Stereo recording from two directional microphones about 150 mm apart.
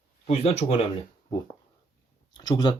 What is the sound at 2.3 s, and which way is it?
Speech, 25° left (ahead or behind).